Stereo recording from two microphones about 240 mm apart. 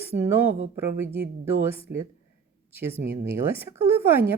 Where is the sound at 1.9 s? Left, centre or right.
Right.